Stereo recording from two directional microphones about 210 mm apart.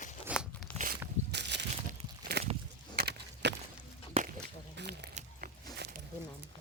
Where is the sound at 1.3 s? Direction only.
55° right (ahead or behind).